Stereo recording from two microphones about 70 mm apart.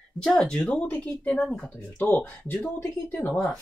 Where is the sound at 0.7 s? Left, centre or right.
Centre.